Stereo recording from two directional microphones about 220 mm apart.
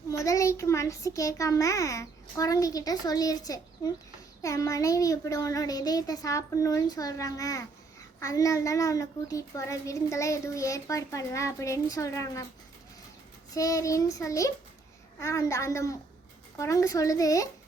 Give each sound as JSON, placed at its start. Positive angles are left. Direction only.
{"t": 0.1, "sound": "a child's voice", "side_deg": 15}
{"t": 13.5, "sound": "a child's voice", "side_deg": 15}